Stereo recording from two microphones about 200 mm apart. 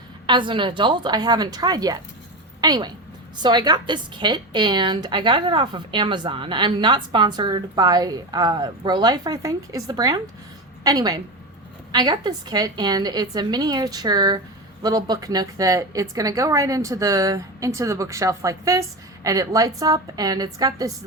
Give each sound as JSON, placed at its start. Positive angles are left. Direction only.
{"t": 0.3, "sound": "a woman's voice", "side_deg": -25}